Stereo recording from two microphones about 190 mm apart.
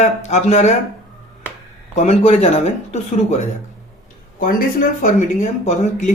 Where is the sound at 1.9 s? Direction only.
35° left (ahead or behind).